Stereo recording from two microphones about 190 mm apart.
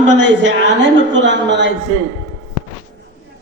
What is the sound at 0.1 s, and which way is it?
A woman's voice, 70° right (ahead or behind).